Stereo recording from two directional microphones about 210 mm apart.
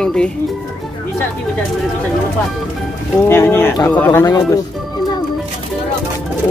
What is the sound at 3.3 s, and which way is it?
Speech, 10° left (ahead or behind).